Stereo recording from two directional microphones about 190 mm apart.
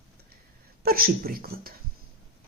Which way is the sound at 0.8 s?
50° right (ahead or behind).